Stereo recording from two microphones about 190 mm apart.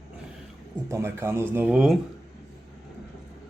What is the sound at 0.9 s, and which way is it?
Speech, 15° right (ahead or behind).